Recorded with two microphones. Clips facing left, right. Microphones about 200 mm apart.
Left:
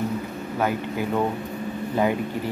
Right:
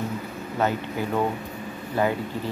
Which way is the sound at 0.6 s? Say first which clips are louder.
Even; 10° left (ahead or behind).